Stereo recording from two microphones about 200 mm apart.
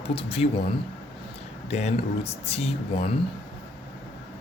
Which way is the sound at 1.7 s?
35° left (ahead or behind).